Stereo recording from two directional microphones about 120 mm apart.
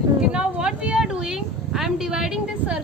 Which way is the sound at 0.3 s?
5° right (ahead or behind).